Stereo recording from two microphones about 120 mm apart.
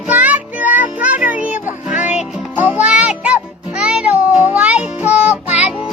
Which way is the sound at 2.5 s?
20° right (ahead or behind).